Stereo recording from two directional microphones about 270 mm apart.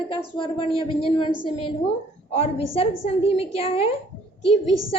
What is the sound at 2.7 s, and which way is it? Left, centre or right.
A woman's voice, left.